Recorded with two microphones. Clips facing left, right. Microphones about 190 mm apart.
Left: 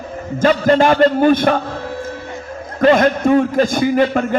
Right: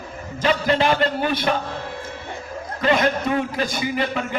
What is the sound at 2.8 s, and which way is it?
A man's voice, 50° left (ahead or behind).